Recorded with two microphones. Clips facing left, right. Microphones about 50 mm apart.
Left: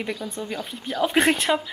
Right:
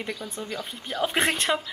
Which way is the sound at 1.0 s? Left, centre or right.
Centre.